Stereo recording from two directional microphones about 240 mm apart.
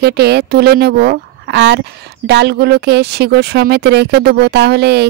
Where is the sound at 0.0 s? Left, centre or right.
Right.